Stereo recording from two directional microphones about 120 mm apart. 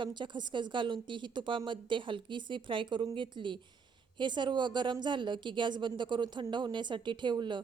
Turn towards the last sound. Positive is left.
turn(degrees=-40)  # may be behind; listen again after turning